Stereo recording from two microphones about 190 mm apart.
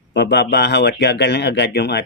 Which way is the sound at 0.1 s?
60° left (ahead or behind).